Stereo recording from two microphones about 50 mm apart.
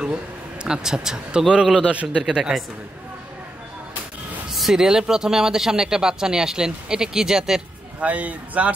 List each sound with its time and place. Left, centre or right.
0.7 s a man's voice: centre
4.6 s speech: centre
8.0 s a man's voice: right